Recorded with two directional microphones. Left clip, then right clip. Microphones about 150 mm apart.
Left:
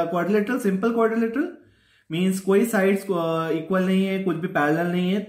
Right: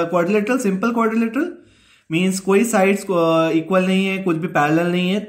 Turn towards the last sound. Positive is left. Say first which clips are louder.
# right 6 dB
turn(degrees=-35)  # may be behind; listen again after turning